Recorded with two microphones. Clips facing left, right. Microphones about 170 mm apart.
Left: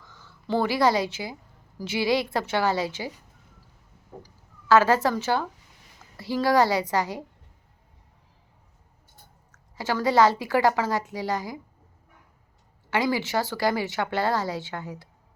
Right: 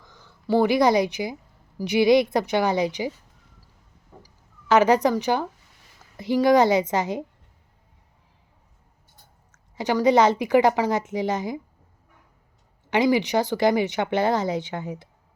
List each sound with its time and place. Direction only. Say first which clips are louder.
0.0 s a woman's voice: right 5 dB; 15° right (ahead or behind)
4.7 s a woman's voice: right 2 dB; 20° right (ahead or behind)
9.5 s speech: right 4 dB; 20° right (ahead or behind)
12.9 s speech: right 5 dB; 20° right (ahead or behind)